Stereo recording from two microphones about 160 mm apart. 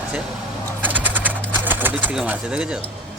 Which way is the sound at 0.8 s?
10° right (ahead or behind).